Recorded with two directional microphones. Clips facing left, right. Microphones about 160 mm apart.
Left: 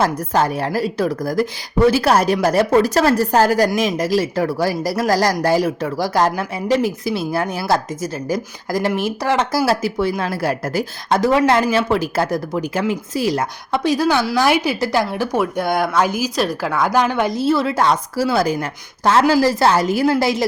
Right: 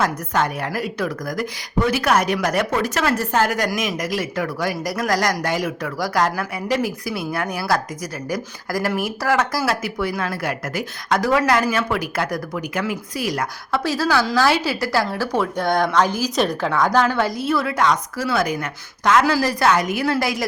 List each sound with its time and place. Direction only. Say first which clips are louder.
0.0 s a woman's voice: left 4 dB; 30° left (ahead or behind)